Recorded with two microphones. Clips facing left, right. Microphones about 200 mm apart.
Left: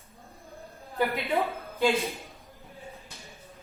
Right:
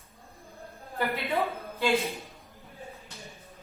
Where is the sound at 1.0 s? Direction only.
15° left (ahead or behind).